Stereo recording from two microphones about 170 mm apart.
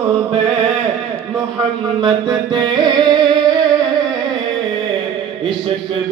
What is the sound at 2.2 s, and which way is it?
Music, 25° right (ahead or behind).